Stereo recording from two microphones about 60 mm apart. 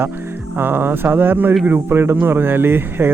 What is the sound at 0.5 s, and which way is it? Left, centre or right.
Speech, right.